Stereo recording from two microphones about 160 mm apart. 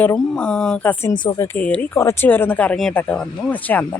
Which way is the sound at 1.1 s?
30° left (ahead or behind).